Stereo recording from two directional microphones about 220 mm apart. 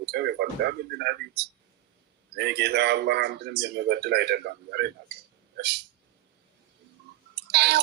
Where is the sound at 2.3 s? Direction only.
50° right (ahead or behind).